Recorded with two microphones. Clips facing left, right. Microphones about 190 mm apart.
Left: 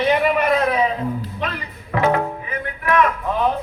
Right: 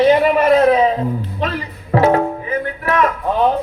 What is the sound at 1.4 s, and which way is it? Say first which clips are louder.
Music: right 5 dB; 35° right (ahead or behind).